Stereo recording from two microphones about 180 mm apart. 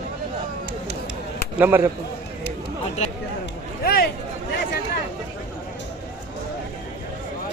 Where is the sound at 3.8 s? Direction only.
55° left (ahead or behind).